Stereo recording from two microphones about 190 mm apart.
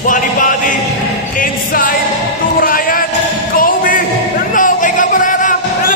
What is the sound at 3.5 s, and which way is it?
Music, 45° left (ahead or behind).